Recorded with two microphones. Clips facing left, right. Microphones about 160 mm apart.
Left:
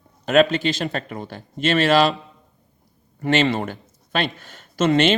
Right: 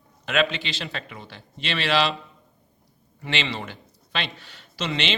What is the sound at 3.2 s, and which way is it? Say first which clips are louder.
Speech: left 10 dB; 45° left (ahead or behind).